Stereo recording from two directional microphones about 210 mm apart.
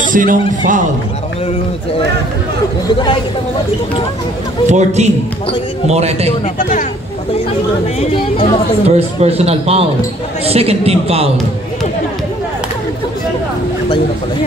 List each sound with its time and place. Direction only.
0.1 s speech: 40° right (ahead or behind)
4.6 s speech: 35° right (ahead or behind)
6.4 s speech: 40° left (ahead or behind)
8.0 s speech: 25° left (ahead or behind)
8.8 s a man's voice: 30° right (ahead or behind)